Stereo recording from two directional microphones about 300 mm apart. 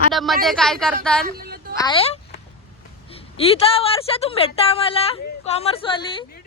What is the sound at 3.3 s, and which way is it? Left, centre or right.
A woman's voice, centre.